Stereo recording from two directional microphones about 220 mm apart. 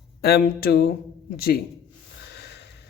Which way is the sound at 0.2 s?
45° left (ahead or behind).